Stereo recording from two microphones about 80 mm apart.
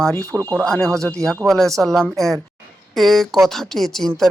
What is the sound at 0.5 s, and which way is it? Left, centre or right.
Speech, centre.